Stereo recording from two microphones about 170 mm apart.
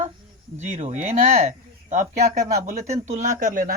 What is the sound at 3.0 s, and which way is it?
Speech, 45° right (ahead or behind).